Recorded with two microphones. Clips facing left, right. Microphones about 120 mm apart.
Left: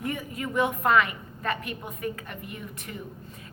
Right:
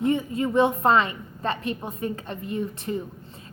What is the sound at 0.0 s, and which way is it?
A woman's voice, 25° right (ahead or behind).